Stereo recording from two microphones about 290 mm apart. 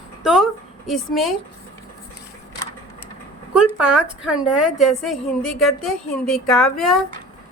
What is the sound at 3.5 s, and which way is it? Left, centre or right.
A woman's voice, centre.